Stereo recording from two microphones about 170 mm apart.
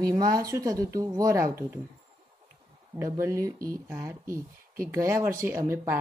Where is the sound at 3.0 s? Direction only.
15° right (ahead or behind).